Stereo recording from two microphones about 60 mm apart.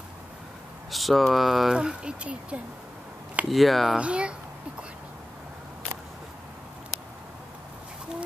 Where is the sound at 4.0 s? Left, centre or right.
Centre.